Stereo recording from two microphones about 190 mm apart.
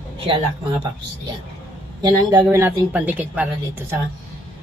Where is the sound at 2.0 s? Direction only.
20° right (ahead or behind).